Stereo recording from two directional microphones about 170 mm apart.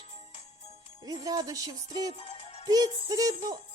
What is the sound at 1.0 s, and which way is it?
Music, 20° right (ahead or behind).